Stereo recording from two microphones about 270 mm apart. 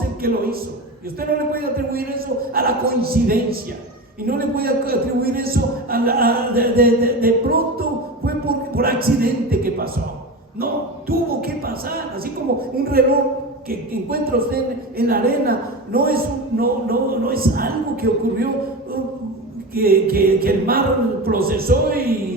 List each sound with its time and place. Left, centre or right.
0.2 s a man's voice: right
11.4 s a man's voice: right
19.7 s a man's voice: right